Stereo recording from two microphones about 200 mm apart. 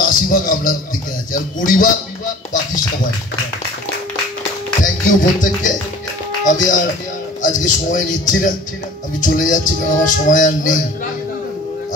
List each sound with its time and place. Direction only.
0.0 s music: 40° left (ahead or behind)
1.3 s a sound: 40° left (ahead or behind)
4.8 s music: 40° left (ahead or behind)